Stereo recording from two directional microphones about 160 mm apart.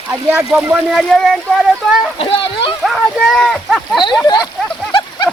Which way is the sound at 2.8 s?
Centre (ahead or behind).